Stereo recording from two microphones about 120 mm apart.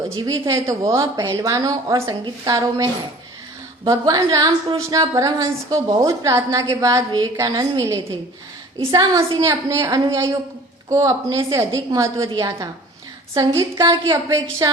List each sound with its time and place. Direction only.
0.2 s a woman's voice: 30° right (ahead or behind)
8.9 s a woman's voice: 30° right (ahead or behind)